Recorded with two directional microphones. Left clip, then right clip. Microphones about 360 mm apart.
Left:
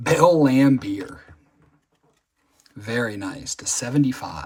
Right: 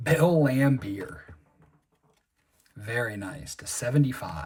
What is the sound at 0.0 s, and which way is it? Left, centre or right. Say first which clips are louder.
Speech: left 7 dB; centre.